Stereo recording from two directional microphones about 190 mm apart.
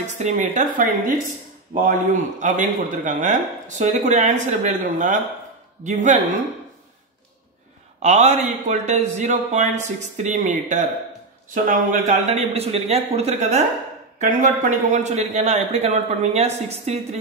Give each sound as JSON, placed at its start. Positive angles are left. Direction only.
{"t": 0.0, "sound": "a man's voice", "side_deg": -40}
{"t": 8.0, "sound": "a man's voice", "side_deg": -35}